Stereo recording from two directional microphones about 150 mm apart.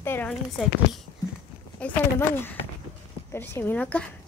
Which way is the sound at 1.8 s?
15° left (ahead or behind).